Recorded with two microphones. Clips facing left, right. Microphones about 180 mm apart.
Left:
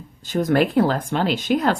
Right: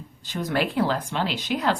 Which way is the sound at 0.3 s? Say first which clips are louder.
Left 7 dB; 50° left (ahead or behind).